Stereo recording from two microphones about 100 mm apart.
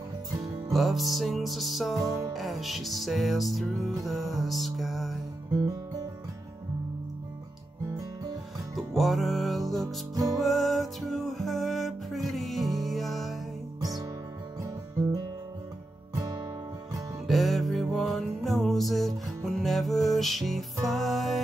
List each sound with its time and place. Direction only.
0.7 s music: centre (ahead or behind)
8.7 s music: centre (ahead or behind)
16.2 s music: 40° right (ahead or behind)
17.3 s music: centre (ahead or behind)